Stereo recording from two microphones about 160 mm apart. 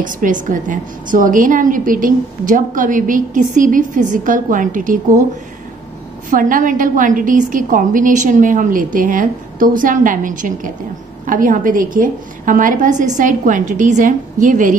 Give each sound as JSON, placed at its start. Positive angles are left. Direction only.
{"t": 0.0, "sound": "a woman's voice", "side_deg": -55}
{"t": 6.3, "sound": "a woman's voice", "side_deg": -55}